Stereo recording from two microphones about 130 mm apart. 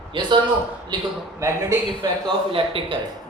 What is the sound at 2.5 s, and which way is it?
Speech, 45° right (ahead or behind).